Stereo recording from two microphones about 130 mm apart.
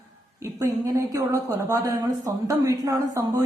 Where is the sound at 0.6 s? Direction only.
25° right (ahead or behind).